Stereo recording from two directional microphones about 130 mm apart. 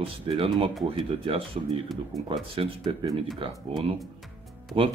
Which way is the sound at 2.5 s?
45° right (ahead or behind).